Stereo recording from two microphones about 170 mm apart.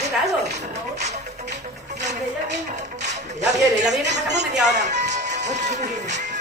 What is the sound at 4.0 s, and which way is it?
Speech, 90° right.